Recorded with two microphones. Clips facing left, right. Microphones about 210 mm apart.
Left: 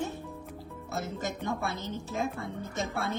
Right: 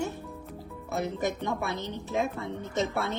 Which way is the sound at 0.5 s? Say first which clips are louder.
Right 5 dB; 20° right (ahead or behind).